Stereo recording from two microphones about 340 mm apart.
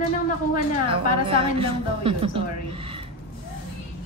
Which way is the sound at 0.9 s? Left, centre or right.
Centre.